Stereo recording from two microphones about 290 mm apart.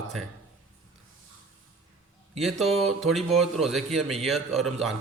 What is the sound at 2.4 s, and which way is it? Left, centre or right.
Speech, centre.